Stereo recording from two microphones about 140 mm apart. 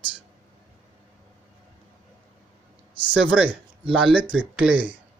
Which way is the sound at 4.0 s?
5° right (ahead or behind).